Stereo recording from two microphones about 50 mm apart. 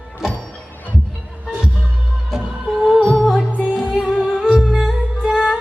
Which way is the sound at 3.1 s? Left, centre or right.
Left.